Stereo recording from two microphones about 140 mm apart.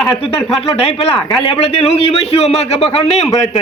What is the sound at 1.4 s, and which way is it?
A man's voice, 45° left (ahead or behind).